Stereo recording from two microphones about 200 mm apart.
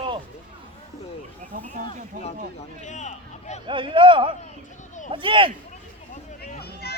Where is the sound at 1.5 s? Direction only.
40° right (ahead or behind).